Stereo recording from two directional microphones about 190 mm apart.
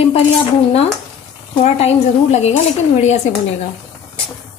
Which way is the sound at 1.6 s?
35° left (ahead or behind).